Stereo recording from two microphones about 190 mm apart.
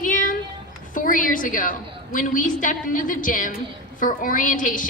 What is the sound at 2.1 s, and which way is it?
A woman's voice, 45° left (ahead or behind).